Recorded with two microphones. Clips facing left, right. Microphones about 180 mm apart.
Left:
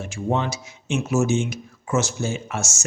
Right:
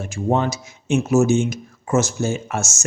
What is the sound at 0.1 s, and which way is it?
Speech, 45° right (ahead or behind).